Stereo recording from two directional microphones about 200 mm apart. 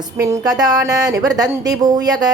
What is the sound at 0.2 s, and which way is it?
A woman's voice, 15° right (ahead or behind).